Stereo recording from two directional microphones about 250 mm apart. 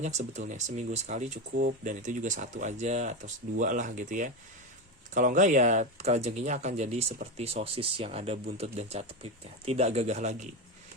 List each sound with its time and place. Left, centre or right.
0.0 s speech: right